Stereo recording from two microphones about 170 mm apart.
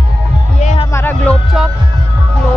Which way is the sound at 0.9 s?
15° left (ahead or behind).